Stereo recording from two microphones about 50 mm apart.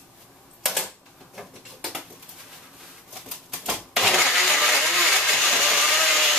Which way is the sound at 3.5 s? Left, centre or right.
Centre.